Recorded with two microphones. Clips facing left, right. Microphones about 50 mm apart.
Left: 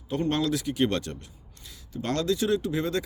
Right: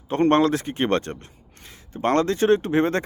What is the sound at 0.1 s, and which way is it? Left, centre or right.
Speech, right.